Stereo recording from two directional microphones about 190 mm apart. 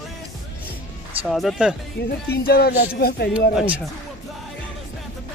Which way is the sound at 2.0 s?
55° left (ahead or behind).